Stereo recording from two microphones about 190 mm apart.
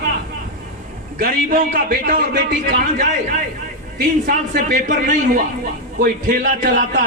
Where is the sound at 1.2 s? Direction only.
50° right (ahead or behind).